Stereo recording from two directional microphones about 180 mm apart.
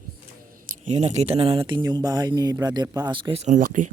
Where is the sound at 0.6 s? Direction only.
40° right (ahead or behind).